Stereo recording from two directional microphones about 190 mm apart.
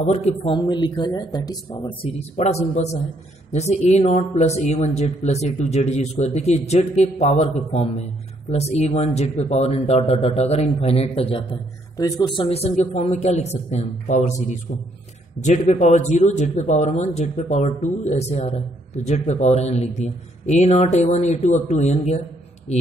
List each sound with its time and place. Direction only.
0.0 s speech: 35° left (ahead or behind)
12.0 s speech: 20° left (ahead or behind)
12.4 s speech: 35° left (ahead or behind)